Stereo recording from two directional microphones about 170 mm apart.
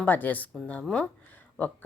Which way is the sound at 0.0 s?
10° left (ahead or behind).